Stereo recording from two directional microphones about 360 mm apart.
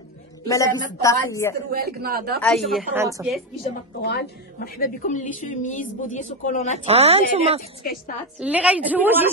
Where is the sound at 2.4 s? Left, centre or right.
Centre.